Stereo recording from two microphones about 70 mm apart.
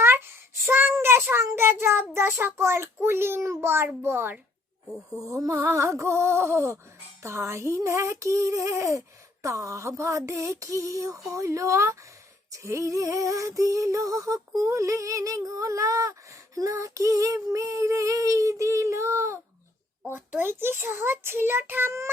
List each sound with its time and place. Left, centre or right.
0.0 s child singing: right
0.9 s a child's voice: right
5.3 s female singing: right
20.1 s a child's voice: right